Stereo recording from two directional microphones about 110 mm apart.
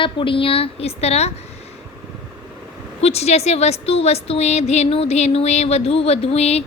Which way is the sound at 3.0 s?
70° left (ahead or behind).